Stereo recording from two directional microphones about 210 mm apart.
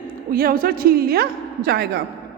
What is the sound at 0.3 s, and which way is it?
A woman's voice, 45° right (ahead or behind).